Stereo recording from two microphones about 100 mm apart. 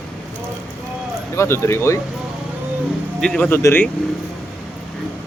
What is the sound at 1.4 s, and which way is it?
Speech, 30° left (ahead or behind).